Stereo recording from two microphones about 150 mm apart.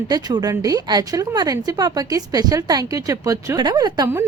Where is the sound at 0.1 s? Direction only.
25° right (ahead or behind).